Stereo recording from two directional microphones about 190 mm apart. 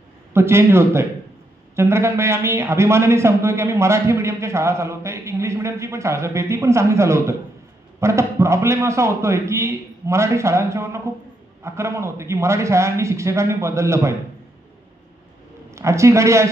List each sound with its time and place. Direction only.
0.3 s a man's voice: 15° right (ahead or behind)
15.7 s speech: 15° right (ahead or behind)